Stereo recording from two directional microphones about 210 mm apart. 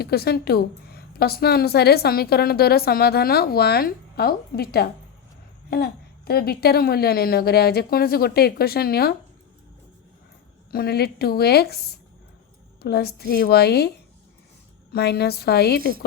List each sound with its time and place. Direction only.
0.0 s a woman's voice: 50° left (ahead or behind)
10.7 s a woman's voice: 45° left (ahead or behind)
12.8 s a woman's voice: 50° left (ahead or behind)
14.9 s a woman's voice: 50° left (ahead or behind)